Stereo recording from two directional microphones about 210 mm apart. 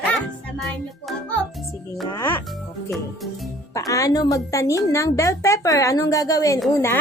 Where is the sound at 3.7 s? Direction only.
15° left (ahead or behind).